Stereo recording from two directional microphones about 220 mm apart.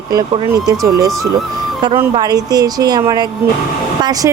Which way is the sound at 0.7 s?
15° right (ahead or behind).